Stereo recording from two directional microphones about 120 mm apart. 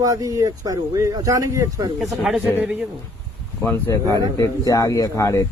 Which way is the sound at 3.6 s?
20° left (ahead or behind).